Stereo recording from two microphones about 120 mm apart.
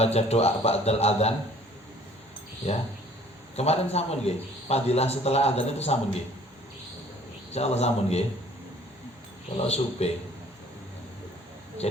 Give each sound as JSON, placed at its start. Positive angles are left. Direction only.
{"t": 0.0, "sound": "a man's voice", "side_deg": 60}
{"t": 2.6, "sound": "a man's voice", "side_deg": 60}
{"t": 7.5, "sound": "a man's voice", "side_deg": 60}
{"t": 9.6, "sound": "a man's voice", "side_deg": 60}